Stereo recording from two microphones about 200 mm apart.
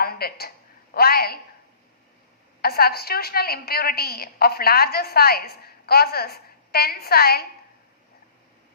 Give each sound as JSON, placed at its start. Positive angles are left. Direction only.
{"t": 0.0, "sound": "a woman's voice", "side_deg": 50}
{"t": 2.6, "sound": "a woman's voice", "side_deg": 50}